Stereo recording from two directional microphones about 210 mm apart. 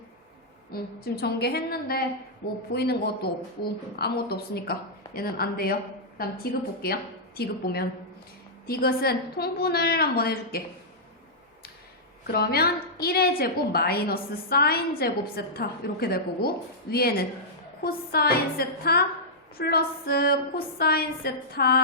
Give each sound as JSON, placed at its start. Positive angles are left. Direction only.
{"t": 0.7, "sound": "a woman's voice", "side_deg": 50}
{"t": 12.2, "sound": "a woman's voice", "side_deg": 50}